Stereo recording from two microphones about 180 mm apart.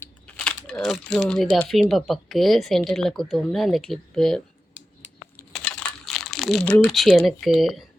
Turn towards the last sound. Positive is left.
turn(degrees=0)  # may be behind; listen again after turning